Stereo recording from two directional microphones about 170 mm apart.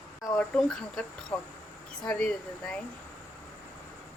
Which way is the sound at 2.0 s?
5° left (ahead or behind).